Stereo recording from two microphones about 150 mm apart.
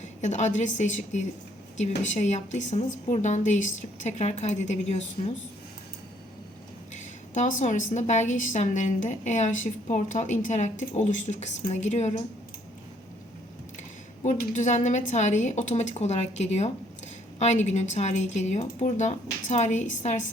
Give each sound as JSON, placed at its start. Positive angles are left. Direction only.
{"t": 0.0, "sound": "a woman's voice", "side_deg": 50}
{"t": 6.9, "sound": "a woman's voice", "side_deg": 55}
{"t": 14.3, "sound": "a woman's voice", "side_deg": 55}